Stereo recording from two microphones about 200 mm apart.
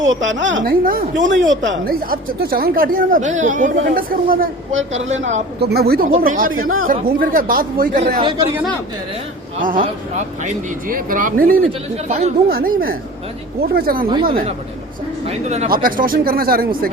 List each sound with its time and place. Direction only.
0.0 s speech: 75° right (ahead or behind)
0.6 s speech: 45° right (ahead or behind)
1.2 s speech: 70° right (ahead or behind)
1.8 s speech: 50° right (ahead or behind)
5.0 s a woman's voice: 35° right (ahead or behind)
5.5 s speech: 50° right (ahead or behind)
8.2 s speech: 25° right (ahead or behind)
9.6 s speech: 40° right (ahead or behind)
15.3 s speech: 35° right (ahead or behind)